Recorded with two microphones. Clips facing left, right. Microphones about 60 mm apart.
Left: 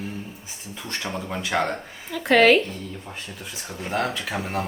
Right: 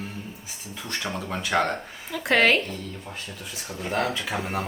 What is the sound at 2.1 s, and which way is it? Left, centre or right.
Speech, centre.